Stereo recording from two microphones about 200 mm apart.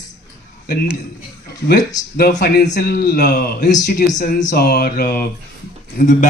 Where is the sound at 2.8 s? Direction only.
50° left (ahead or behind).